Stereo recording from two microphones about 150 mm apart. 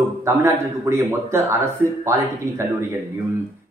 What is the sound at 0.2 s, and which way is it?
Speech, 20° right (ahead or behind).